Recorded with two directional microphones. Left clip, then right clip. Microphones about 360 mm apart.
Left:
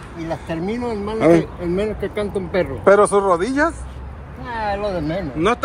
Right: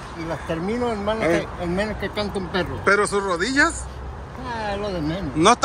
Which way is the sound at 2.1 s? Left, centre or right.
Right.